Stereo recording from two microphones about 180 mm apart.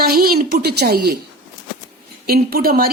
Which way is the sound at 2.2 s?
55° right (ahead or behind).